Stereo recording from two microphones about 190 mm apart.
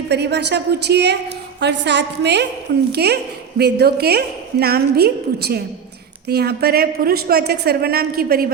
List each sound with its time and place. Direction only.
0.1 s a woman's voice: 60° right (ahead or behind)